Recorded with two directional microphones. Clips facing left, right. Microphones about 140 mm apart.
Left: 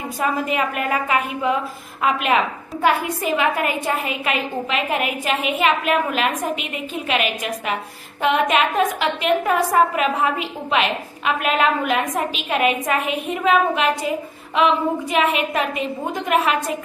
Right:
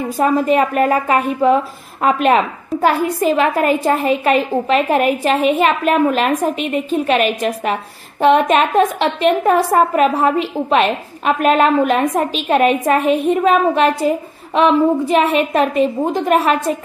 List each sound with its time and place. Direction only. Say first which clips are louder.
0.2 s a woman's voice: right 8 dB; 40° right (ahead or behind)